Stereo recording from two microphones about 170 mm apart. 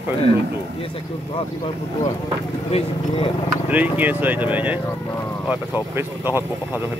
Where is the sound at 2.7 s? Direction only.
35° left (ahead or behind).